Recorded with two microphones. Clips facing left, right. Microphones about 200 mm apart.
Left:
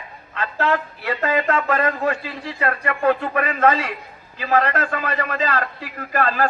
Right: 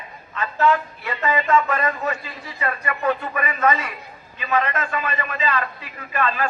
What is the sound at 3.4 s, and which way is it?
Speech, 70° left (ahead or behind).